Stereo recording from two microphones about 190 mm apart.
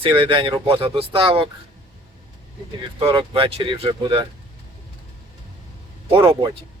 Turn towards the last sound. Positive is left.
turn(degrees=-30)  # may be behind; listen again after turning